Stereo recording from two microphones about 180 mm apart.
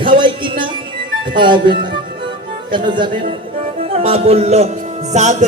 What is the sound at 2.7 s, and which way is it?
Speech, 25° right (ahead or behind).